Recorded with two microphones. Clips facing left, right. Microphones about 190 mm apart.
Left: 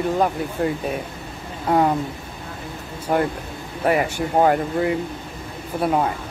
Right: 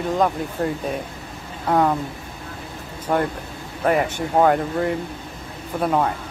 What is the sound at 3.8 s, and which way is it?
Speech, 10° left (ahead or behind).